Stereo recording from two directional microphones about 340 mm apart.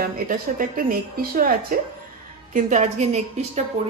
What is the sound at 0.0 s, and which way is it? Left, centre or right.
Speech, right.